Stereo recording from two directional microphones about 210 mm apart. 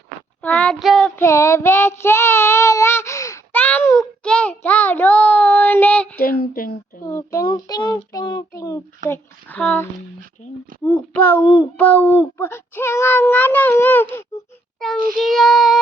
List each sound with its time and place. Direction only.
0.4 s child singing: 5° left (ahead or behind)
6.1 s a sound: 45° left (ahead or behind)
7.0 s child singing: 15° left (ahead or behind)
9.0 s speech: 10° left (ahead or behind)
10.8 s speech: 5° left (ahead or behind)
14.9 s child singing: 40° right (ahead or behind)
15.2 s child singing: centre (ahead or behind)